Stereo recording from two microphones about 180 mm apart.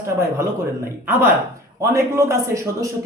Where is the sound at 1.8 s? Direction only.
15° right (ahead or behind).